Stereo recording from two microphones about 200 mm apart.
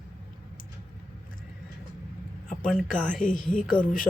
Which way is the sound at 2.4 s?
Centre (ahead or behind).